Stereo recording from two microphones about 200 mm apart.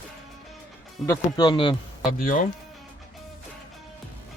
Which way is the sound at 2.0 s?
40° left (ahead or behind).